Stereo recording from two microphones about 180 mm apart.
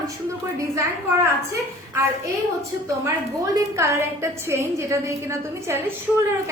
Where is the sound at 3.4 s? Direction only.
15° right (ahead or behind).